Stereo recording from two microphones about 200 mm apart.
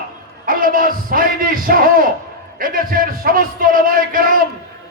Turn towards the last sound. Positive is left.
turn(degrees=-45)  # may be behind; listen again after turning